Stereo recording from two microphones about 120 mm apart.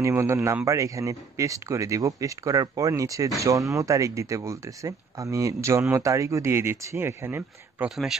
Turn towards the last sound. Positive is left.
turn(degrees=-20)  # may be behind; listen again after turning